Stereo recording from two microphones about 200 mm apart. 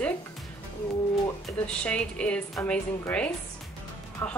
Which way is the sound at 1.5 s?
5° left (ahead or behind).